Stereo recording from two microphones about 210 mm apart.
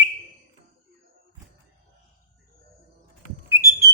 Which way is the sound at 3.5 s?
15° right (ahead or behind).